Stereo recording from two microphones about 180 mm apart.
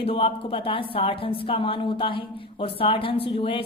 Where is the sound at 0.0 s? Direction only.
30° left (ahead or behind).